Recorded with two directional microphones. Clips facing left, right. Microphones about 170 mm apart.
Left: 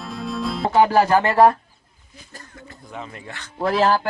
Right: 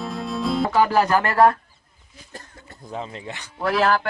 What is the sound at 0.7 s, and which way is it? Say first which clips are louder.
Speech: left 4 dB; 20° left (ahead or behind).